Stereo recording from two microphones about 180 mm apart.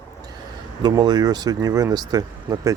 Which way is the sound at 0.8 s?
25° right (ahead or behind).